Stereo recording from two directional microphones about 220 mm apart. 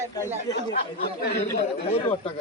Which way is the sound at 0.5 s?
45° left (ahead or behind).